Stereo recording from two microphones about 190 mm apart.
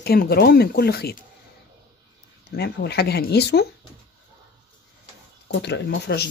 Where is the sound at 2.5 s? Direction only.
60° left (ahead or behind).